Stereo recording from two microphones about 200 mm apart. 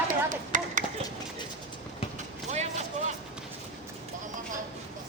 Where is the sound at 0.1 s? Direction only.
40° right (ahead or behind).